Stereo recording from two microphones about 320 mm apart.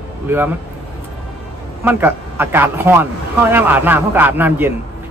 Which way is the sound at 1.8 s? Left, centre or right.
Centre.